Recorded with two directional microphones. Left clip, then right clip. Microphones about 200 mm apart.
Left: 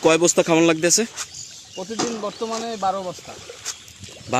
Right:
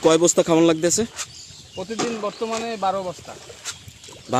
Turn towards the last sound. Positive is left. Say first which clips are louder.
# even
turn(degrees=-15)  # may be behind; listen again after turning